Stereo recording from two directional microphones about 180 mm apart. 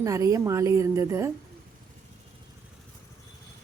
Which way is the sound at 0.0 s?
20° right (ahead or behind).